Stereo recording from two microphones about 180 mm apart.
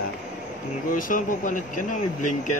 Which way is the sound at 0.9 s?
50° left (ahead or behind).